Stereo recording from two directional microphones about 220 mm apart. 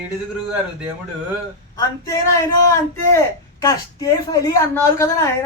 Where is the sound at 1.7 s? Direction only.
15° left (ahead or behind).